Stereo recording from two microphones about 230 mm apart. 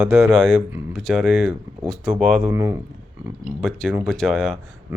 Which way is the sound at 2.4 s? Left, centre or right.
Centre.